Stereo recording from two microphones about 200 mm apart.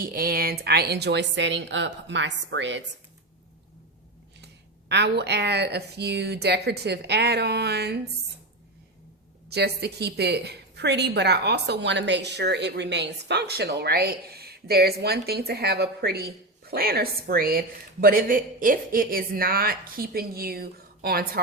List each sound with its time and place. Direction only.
0.0 s a woman's voice: 45° right (ahead or behind); by 2.8 s 65° right (ahead or behind)
4.9 s a woman's voice: 55° right (ahead or behind)
9.5 s a woman's voice: 55° right (ahead or behind)